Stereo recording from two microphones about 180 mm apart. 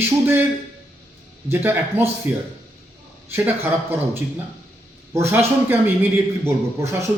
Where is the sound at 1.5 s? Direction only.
10° right (ahead or behind).